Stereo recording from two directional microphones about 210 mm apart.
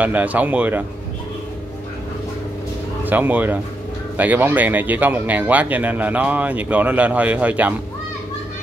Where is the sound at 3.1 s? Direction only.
10° right (ahead or behind).